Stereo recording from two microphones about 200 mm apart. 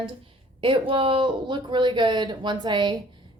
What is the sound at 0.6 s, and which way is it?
A woman's voice, 25° right (ahead or behind).